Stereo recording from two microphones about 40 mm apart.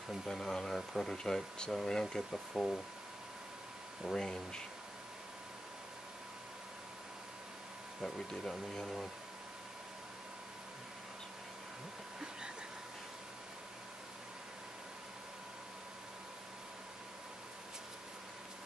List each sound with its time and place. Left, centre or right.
0.3 s speech: centre
4.0 s speech: centre
8.3 s speech: centre